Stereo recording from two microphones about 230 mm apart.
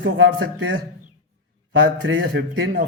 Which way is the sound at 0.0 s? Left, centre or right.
Right.